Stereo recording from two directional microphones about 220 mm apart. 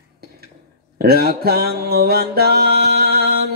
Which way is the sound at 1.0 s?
45° right (ahead or behind).